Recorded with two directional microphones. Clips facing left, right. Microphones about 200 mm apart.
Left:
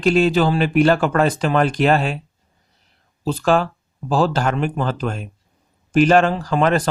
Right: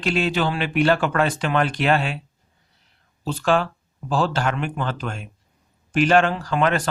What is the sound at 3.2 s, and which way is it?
Speech, 40° left (ahead or behind).